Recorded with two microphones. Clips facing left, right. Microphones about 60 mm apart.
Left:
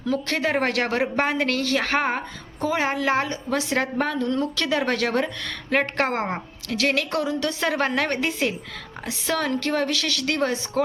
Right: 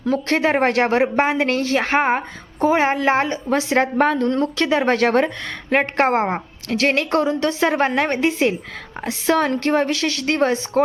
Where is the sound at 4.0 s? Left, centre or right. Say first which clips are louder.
Right 6 dB; right.